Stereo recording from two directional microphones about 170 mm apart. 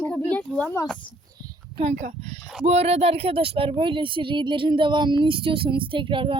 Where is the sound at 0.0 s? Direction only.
10° left (ahead or behind).